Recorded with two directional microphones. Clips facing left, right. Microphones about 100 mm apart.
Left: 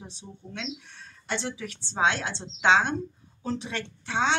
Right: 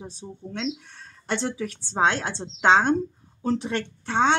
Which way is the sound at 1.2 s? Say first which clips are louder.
Right 5 dB; 45° right (ahead or behind).